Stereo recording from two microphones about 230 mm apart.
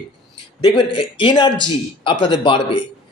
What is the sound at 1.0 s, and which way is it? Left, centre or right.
A man's voice, left.